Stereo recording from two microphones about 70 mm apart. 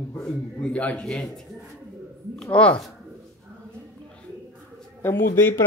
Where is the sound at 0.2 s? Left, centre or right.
Centre.